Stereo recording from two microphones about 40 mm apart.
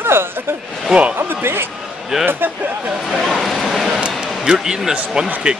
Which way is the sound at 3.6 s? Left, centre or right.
Centre.